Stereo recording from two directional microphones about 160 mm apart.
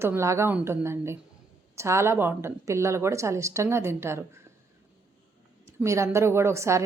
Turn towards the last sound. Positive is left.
turn(degrees=-15)  # may be behind; listen again after turning